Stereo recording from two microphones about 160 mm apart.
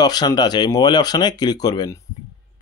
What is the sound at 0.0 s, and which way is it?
Speech, 25° left (ahead or behind).